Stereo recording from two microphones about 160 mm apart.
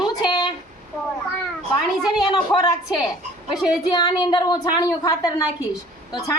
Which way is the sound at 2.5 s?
25° left (ahead or behind).